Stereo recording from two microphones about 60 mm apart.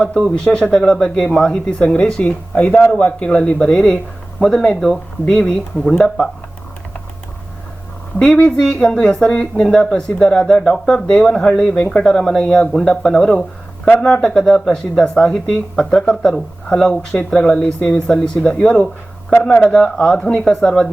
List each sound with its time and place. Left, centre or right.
0.2 s a woman's voice: centre
8.2 s a woman's voice: centre